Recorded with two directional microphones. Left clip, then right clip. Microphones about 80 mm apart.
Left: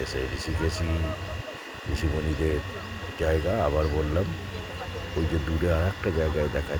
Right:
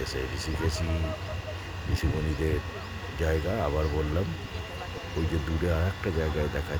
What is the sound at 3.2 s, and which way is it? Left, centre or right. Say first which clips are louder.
Speech: left 4 dB; centre.